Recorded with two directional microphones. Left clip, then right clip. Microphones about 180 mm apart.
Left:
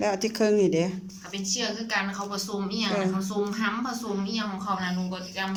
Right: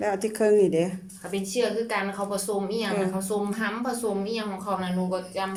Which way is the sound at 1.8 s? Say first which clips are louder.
Right 1 dB; 35° right (ahead or behind).